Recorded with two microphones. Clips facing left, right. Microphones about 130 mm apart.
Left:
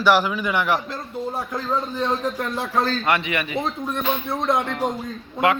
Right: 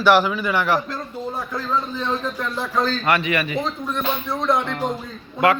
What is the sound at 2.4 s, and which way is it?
Speech, 60° left (ahead or behind).